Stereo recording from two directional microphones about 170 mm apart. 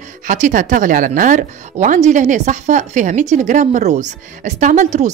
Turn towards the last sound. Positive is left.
turn(degrees=-45)  # may be behind; listen again after turning